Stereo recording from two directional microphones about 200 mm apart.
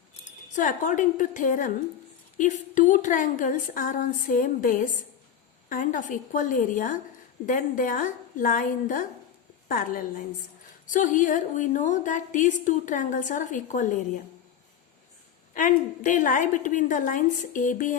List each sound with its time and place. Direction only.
0.5 s a woman's voice: 40° left (ahead or behind)
15.5 s a woman's voice: 40° left (ahead or behind)